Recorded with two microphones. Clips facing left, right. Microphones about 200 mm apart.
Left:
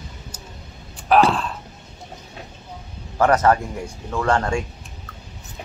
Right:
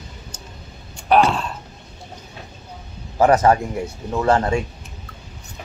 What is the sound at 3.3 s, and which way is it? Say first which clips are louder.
Speech: right 2 dB; 10° right (ahead or behind).